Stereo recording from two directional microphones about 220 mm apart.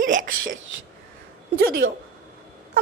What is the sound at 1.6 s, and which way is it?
Speech, 45° right (ahead or behind).